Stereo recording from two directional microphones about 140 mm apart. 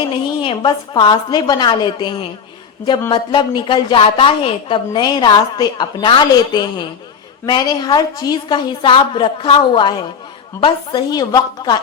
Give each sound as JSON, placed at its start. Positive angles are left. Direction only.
{"t": 0.1, "sound": "a woman's voice", "side_deg": 35}